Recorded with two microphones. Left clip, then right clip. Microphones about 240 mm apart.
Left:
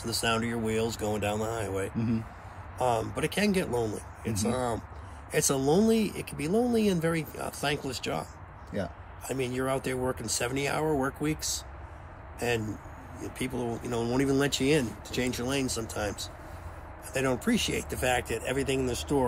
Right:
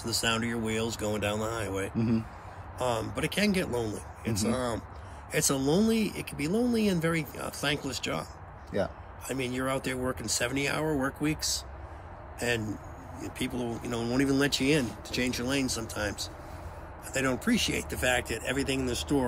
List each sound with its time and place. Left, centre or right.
0.0 s speech: centre
2.0 s speech: right
2.8 s speech: centre
8.7 s speech: right
9.3 s speech: centre